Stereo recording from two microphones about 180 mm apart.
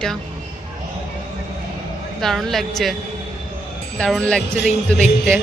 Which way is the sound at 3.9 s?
5° left (ahead or behind).